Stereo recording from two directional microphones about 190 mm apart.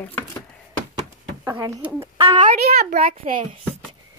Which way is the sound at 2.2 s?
30° right (ahead or behind).